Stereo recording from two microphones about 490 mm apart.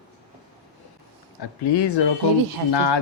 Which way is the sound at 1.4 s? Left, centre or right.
Left.